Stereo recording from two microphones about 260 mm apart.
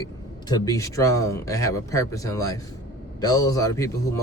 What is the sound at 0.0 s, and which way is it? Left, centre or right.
Speech, centre.